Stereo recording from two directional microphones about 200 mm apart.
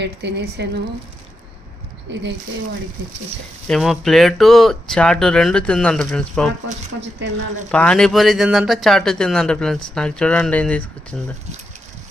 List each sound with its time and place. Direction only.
0.0 s a woman's voice: 60° right (ahead or behind)
2.1 s a woman's voice: 60° right (ahead or behind)
3.7 s speech: centre (ahead or behind)
7.7 s speech: 5° left (ahead or behind)